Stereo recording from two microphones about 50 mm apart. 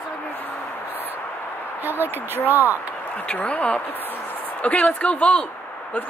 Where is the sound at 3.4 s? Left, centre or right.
Left.